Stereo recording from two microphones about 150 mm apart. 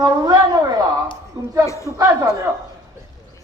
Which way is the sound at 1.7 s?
20° left (ahead or behind).